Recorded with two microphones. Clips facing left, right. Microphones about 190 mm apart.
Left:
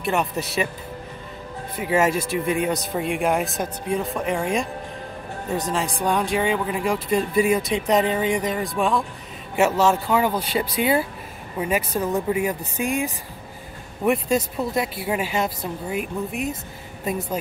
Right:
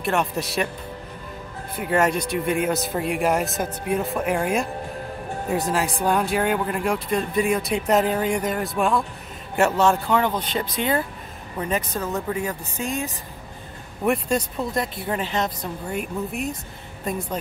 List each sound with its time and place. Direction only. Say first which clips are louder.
0.0 s speech: even; centre (ahead or behind)
1.8 s speech: left 1 dB; centre (ahead or behind)
14.0 s speech: left 1 dB; centre (ahead or behind)